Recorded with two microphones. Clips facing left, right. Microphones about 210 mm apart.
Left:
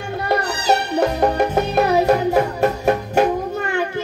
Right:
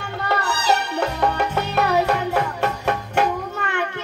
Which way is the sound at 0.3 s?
40° left (ahead or behind).